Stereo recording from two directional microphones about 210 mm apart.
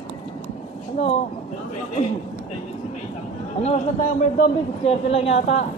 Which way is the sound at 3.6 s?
35° left (ahead or behind).